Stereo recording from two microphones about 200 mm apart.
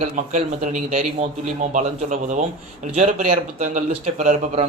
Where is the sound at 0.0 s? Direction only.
35° right (ahead or behind).